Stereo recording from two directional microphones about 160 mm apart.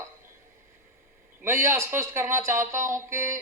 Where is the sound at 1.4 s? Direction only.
15° right (ahead or behind).